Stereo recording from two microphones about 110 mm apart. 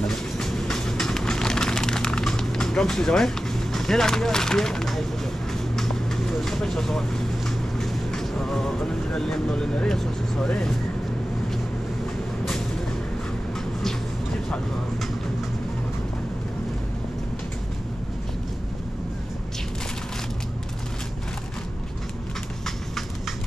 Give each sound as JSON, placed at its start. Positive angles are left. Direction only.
{"t": 0.0, "sound": "train", "side_deg": 5}
{"t": 6.4, "sound": "speech", "side_deg": 5}